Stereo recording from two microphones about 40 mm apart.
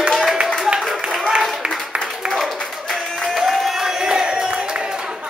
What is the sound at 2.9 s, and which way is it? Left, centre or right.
Music, centre.